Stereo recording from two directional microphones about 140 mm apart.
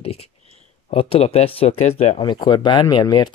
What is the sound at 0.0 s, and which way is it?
Speech, 45° left (ahead or behind).